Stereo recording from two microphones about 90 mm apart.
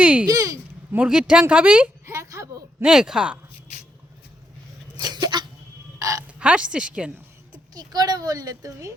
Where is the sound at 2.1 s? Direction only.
35° right (ahead or behind).